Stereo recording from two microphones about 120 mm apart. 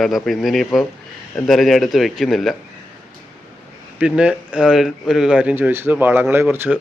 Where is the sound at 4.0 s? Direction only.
10° right (ahead or behind).